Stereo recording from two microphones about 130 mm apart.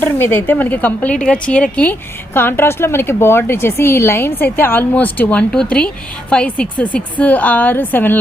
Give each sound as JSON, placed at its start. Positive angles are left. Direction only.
{"t": 0.0, "sound": "a woman's voice", "side_deg": 15}